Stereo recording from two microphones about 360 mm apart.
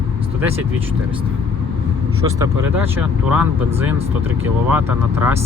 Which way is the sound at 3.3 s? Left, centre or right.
Centre.